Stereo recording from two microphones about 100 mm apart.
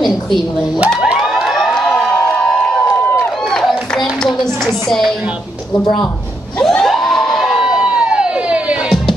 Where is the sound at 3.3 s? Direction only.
Centre (ahead or behind).